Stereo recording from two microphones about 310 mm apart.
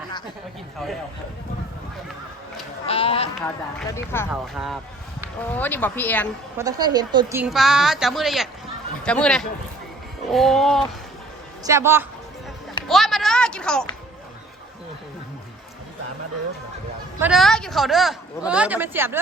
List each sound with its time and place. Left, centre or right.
2.8 s a sound: centre
3.4 s speech: centre
6.6 s speech: centre
17.2 s speech: centre